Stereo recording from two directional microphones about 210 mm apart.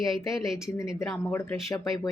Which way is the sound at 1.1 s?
10° left (ahead or behind).